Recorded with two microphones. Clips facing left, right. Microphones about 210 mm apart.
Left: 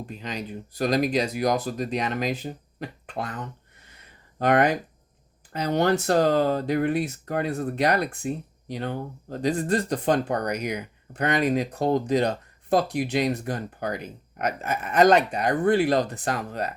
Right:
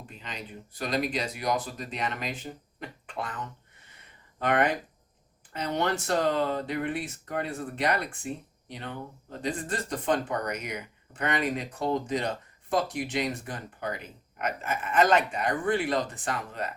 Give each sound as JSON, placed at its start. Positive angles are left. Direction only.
{"t": 0.0, "sound": "speech", "side_deg": 40}
{"t": 4.4, "sound": "speech", "side_deg": 40}